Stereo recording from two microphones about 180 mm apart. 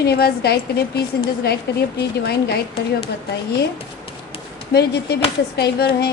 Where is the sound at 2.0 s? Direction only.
65° left (ahead or behind).